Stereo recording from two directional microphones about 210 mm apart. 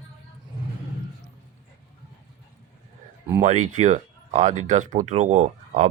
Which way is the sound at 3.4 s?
35° right (ahead or behind).